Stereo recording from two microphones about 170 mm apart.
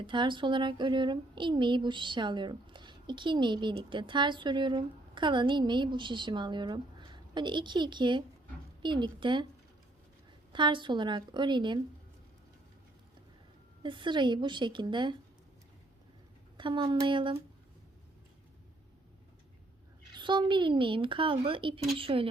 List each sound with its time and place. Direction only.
0.0 s speech: 30° right (ahead or behind)
10.5 s speech: 30° right (ahead or behind)
13.8 s speech: 30° right (ahead or behind)
16.6 s speech: 30° right (ahead or behind)
20.1 s a woman's voice: 30° right (ahead or behind)